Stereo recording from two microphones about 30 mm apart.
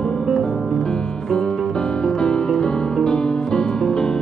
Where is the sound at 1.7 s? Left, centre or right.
Left.